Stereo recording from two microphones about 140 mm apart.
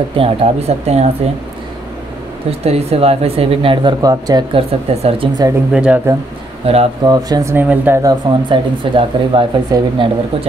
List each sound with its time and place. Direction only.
0.1 s speech: 45° right (ahead or behind)
2.6 s speech: 45° right (ahead or behind); by 4.5 s 25° right (ahead or behind)
4.6 s speech: 40° right (ahead or behind)
5.7 s speech: 5° right (ahead or behind)
6.6 s speech: 45° right (ahead or behind)
7.1 s speech: 25° right (ahead or behind)
7.5 s speech: 15° right (ahead or behind)
8.0 s speech: 30° right (ahead or behind)